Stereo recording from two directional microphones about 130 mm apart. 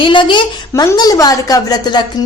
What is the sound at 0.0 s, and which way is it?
Speech, 40° left (ahead or behind).